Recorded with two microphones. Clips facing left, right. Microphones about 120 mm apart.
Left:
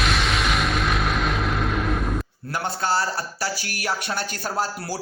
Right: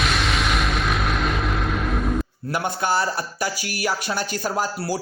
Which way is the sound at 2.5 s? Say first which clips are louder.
Right 1 dB; 15° right (ahead or behind).